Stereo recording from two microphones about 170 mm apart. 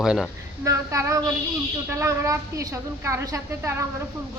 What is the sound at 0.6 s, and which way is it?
A woman's voice, 15° right (ahead or behind).